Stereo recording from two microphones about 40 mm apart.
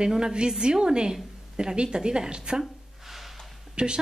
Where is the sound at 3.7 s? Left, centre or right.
Right.